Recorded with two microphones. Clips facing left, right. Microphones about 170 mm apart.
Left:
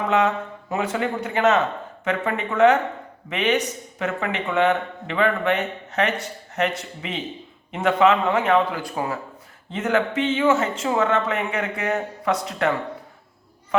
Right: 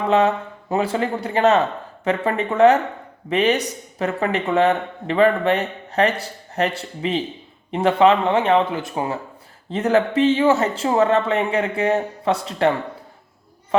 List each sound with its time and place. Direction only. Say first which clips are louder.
0.1 s a man's voice: right 5 dB; 30° right (ahead or behind)
9.7 s a man's voice: right 4 dB; 35° right (ahead or behind)